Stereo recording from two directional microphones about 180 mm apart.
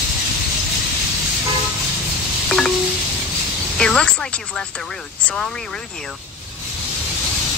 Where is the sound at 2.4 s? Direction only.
5° left (ahead or behind).